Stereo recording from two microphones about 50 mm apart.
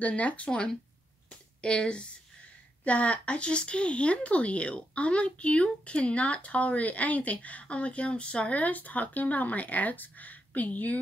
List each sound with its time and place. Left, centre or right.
0.0 s a woman's voice: left
1.6 s a woman's voice: centre